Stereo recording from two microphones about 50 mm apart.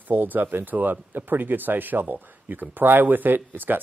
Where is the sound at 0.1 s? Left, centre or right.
Right.